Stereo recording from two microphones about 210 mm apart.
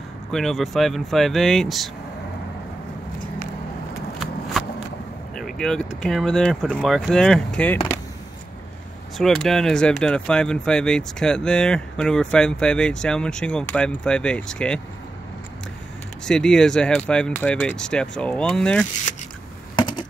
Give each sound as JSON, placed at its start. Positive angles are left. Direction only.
{"t": 0.3, "sound": "speech", "side_deg": 0}
{"t": 5.3, "sound": "vehicle", "side_deg": 5}
{"t": 6.0, "sound": "speech", "side_deg": 0}
{"t": 9.2, "sound": "speech", "side_deg": 0}
{"t": 16.3, "sound": "speech", "side_deg": 5}
{"t": 19.7, "sound": "a sound", "side_deg": 20}